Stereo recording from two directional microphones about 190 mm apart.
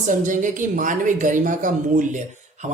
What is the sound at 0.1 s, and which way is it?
A woman's voice, 40° right (ahead or behind).